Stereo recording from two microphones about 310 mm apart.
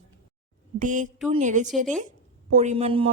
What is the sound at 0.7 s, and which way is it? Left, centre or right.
A woman's voice, right.